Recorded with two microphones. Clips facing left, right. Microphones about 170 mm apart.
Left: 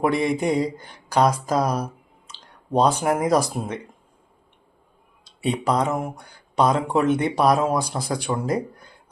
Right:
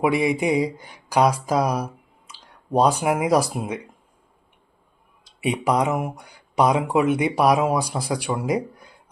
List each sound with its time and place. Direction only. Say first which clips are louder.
0.0 s speech: right 1 dB; 10° right (ahead or behind)
5.4 s speech: right 1 dB; 15° right (ahead or behind)